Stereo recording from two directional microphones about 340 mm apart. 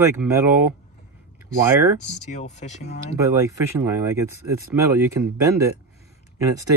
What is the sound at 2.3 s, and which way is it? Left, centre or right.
Speech, centre.